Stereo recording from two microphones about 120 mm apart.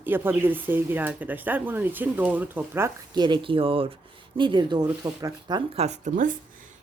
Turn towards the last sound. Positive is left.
turn(degrees=-90)